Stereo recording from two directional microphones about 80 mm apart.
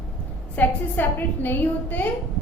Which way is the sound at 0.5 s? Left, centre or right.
Left.